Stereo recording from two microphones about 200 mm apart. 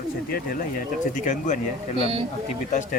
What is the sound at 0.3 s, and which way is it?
Speech, 50° left (ahead or behind).